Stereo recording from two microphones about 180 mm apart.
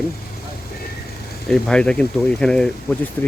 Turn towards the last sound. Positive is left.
turn(degrees=10)  # may be behind; listen again after turning